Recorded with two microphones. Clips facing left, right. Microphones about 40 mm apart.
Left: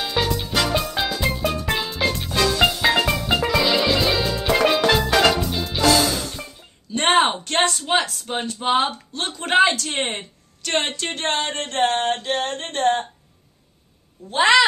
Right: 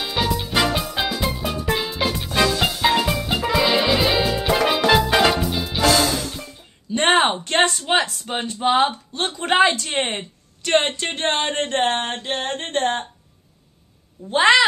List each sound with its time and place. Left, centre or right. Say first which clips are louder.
0.0 s music: even; centre
6.9 s a woman's voice: right 1 dB; centre
9.8 s a woman's voice: right 1 dB; right
10.9 s a sound: right 2 dB; right